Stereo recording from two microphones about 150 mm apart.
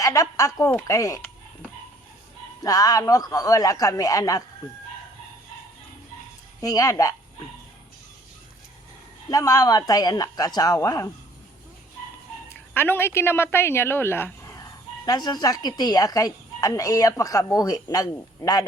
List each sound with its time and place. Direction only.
0.0 s a woman's voice: 20° left (ahead or behind)
2.6 s speech: 25° left (ahead or behind)
6.6 s speech: 25° left (ahead or behind)
9.3 s speech: 25° left (ahead or behind)
12.7 s speech: 15° left (ahead or behind)